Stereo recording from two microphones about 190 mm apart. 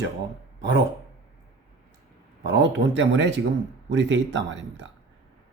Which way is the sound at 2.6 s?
70° right (ahead or behind).